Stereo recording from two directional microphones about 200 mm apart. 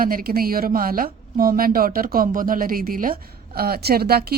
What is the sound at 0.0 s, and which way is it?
Speech, 45° right (ahead or behind).